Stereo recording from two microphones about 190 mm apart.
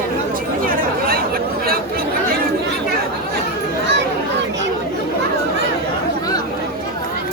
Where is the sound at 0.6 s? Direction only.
50° right (ahead or behind).